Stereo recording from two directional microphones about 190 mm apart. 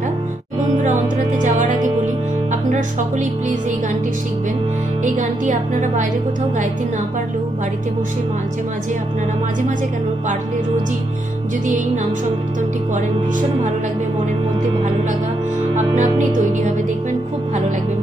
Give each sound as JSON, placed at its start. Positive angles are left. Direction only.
{"t": 0.7, "sound": "music", "side_deg": -40}
{"t": 2.7, "sound": "speech", "side_deg": -40}
{"t": 5.0, "sound": "speech", "side_deg": -40}
{"t": 15.7, "sound": "speech", "side_deg": -40}